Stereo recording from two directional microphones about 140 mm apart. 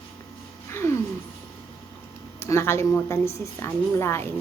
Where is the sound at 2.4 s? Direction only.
20° left (ahead or behind).